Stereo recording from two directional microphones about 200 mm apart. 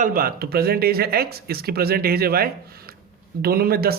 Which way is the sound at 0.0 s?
45° right (ahead or behind).